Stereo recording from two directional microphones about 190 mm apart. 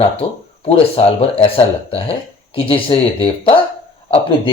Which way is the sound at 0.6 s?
30° left (ahead or behind).